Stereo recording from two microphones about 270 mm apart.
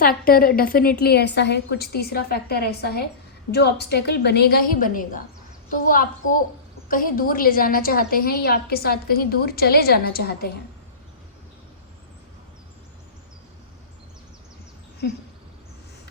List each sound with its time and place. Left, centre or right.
0.0 s a woman's voice: left